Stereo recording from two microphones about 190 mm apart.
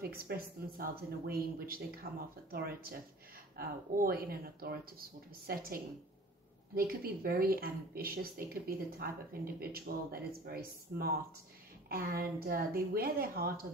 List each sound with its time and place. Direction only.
0.0 s a woman's voice: 55° right (ahead or behind)